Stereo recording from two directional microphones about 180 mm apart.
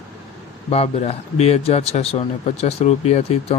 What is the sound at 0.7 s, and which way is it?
Speech, 35° left (ahead or behind).